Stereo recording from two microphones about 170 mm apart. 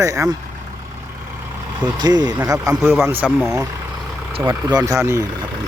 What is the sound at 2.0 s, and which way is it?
Speech, 25° right (ahead or behind).